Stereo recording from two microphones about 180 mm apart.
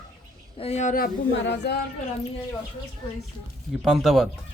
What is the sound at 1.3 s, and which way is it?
Speech, 80° left.